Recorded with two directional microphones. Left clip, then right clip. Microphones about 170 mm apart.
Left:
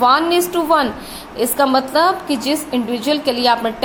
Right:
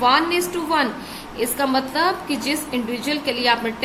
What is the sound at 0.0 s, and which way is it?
A woman's voice, 35° left (ahead or behind).